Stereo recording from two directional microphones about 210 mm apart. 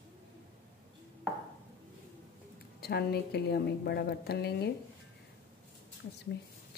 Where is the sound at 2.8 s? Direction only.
50° left (ahead or behind).